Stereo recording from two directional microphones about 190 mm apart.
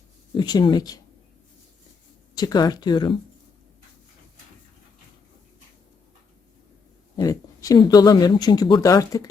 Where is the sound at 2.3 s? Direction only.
20° left (ahead or behind).